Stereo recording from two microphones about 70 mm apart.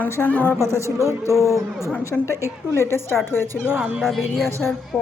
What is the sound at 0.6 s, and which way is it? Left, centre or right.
Speech, right.